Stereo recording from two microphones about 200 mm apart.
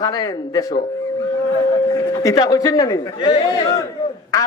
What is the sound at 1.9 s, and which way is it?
Speech, 15° left (ahead or behind).